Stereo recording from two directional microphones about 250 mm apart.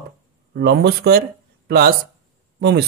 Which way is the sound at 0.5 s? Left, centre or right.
Right.